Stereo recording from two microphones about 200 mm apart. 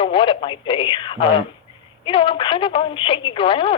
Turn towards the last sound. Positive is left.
turn(degrees=25)  # may be behind; listen again after turning